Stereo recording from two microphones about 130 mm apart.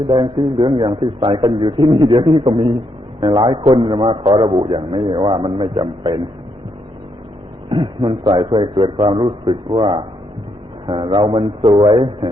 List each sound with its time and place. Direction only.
0.1 s a man's voice: 40° right (ahead or behind)
7.7 s a man's voice: 40° right (ahead or behind)